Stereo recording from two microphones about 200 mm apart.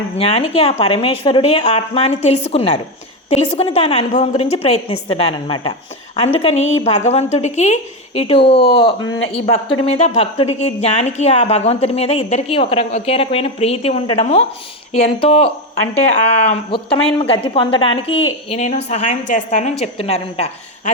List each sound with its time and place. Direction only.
0.2 s a woman's voice: 30° left (ahead or behind)